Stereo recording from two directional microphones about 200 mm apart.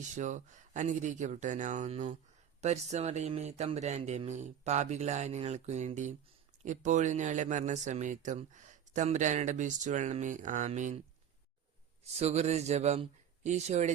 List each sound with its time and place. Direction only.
0.0 s speech: 35° right (ahead or behind)
12.2 s speech: 35° right (ahead or behind)